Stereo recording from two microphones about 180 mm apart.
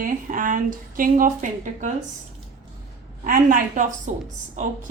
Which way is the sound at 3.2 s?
50° right (ahead or behind).